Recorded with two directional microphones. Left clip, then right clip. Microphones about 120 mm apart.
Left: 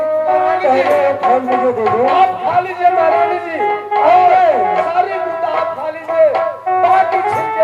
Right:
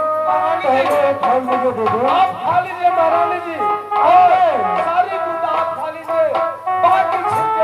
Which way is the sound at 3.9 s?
45° left (ahead or behind).